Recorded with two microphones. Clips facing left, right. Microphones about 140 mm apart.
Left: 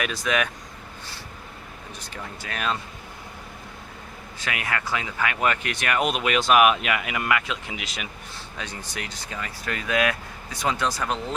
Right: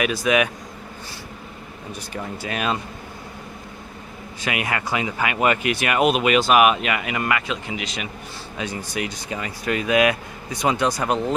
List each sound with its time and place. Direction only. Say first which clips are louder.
0.0 s speech: right 6 dB; 10° right (ahead or behind)
2.1 s speech: right 6 dB; 15° right (ahead or behind)
4.4 s speech: right 4 dB; 15° right (ahead or behind); by 8.0 s centre (ahead or behind)
8.5 s speech: right 8 dB; 10° right (ahead or behind)